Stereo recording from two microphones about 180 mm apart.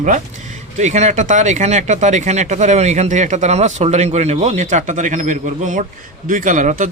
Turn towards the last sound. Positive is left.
turn(degrees=-45)  # may be behind; listen again after turning